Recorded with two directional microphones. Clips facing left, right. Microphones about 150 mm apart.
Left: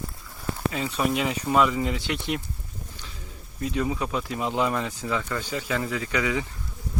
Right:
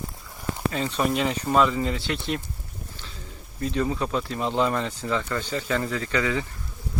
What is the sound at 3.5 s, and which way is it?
Speech, 10° left (ahead or behind).